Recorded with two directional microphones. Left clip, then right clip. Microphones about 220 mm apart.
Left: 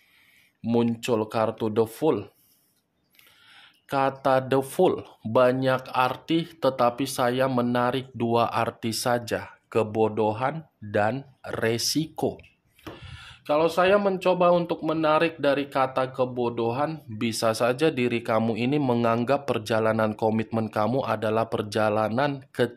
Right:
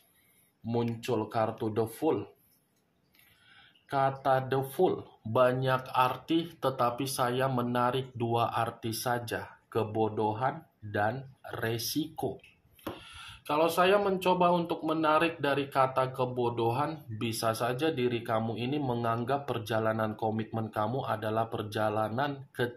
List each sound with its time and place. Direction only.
0.7 s speech: 50° left (ahead or behind)
3.5 s speech: 50° left (ahead or behind)